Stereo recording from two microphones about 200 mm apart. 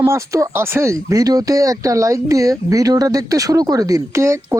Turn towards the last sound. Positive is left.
turn(degrees=-15)  # may be behind; listen again after turning